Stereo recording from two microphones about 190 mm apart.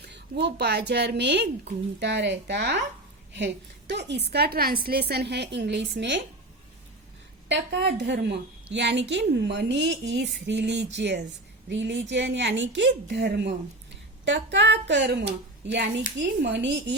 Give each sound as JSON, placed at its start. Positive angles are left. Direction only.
{"t": 0.0, "sound": "a woman's voice", "side_deg": -65}
{"t": 7.4, "sound": "a woman's voice", "side_deg": -65}